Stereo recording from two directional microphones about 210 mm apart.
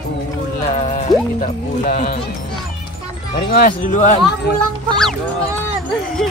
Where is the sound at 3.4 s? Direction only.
40° left (ahead or behind).